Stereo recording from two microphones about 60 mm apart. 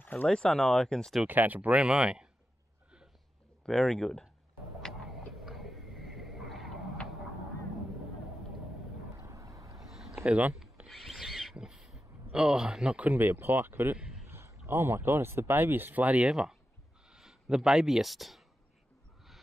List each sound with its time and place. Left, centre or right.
0.0 s a sound: left
0.3 s speech: centre
1.2 s speech: right; by 2.2 s centre
3.6 s speech: centre
4.8 s a sound: centre
9.2 s boat: right
9.8 s a sound: centre
10.2 s speech: right
10.9 s a sound: centre
13.0 s speech: right
14.2 s speech: right
16.3 s speech: centre